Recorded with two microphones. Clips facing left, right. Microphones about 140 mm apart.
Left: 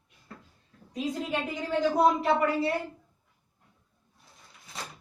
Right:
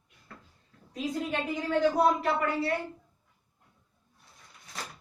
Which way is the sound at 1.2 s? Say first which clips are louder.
Even; centre (ahead or behind).